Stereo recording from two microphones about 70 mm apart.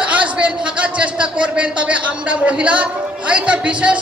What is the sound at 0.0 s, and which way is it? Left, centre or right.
A man's voice, centre.